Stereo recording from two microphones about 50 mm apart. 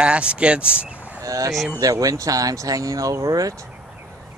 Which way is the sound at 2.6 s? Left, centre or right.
Right.